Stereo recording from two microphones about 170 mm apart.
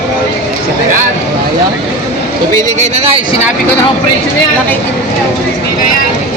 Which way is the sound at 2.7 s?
40° right (ahead or behind).